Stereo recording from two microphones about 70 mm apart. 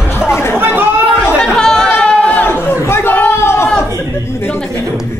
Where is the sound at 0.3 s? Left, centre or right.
Left.